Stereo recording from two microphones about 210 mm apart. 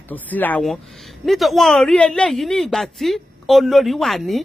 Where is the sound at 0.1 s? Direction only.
10° left (ahead or behind).